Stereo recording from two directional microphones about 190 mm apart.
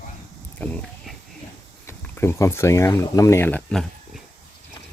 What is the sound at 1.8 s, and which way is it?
Speech, 15° left (ahead or behind).